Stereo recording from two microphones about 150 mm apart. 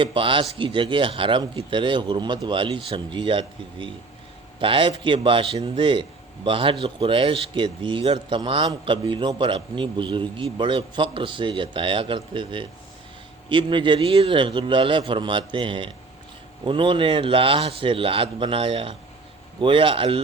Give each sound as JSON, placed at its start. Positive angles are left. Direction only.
{"t": 0.0, "sound": "a man's voice", "side_deg": -35}